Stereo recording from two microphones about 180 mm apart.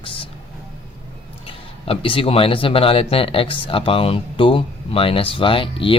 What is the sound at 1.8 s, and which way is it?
Speech, 30° left (ahead or behind).